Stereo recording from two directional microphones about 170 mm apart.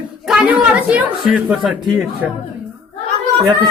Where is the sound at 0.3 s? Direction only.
5° right (ahead or behind).